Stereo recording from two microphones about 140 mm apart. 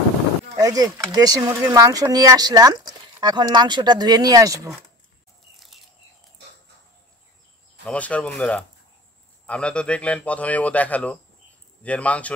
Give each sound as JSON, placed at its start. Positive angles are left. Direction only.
{"t": 0.6, "sound": "speech", "side_deg": -25}
{"t": 7.8, "sound": "a man's voice", "side_deg": 10}